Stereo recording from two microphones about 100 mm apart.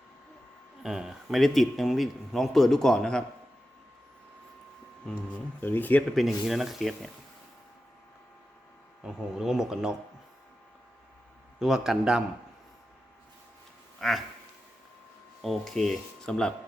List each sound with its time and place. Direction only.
0.8 s speech: 5° right (ahead or behind)
5.0 s speech: 10° left (ahead or behind)
6.1 s speech: centre (ahead or behind)
9.0 s speech: 5° right (ahead or behind)
11.6 s speech: 5° right (ahead or behind)
14.0 s speech: centre (ahead or behind)
15.4 s speech: centre (ahead or behind)